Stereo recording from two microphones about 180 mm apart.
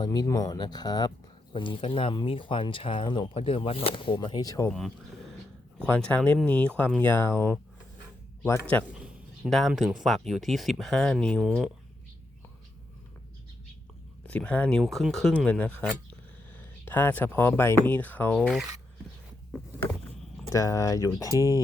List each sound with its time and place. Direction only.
0.0 s speech: 20° left (ahead or behind)
4.7 s speech: centre (ahead or behind)
8.9 s speech: 5° right (ahead or behind)
14.3 s speech: 5° left (ahead or behind)
20.5 s speech: 20° left (ahead or behind)
21.2 s speech: 20° right (ahead or behind)